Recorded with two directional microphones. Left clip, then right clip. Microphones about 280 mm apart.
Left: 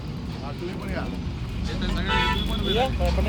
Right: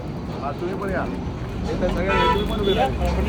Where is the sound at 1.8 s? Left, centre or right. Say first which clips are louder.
Right 5 dB; centre.